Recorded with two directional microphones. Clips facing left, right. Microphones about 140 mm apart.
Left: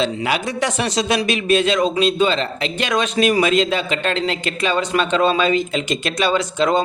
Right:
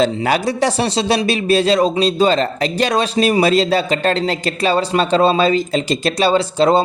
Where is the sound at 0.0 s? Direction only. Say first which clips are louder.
Right 5 dB; 40° right (ahead or behind).